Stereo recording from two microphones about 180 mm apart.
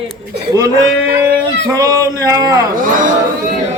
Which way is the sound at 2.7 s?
50° right (ahead or behind).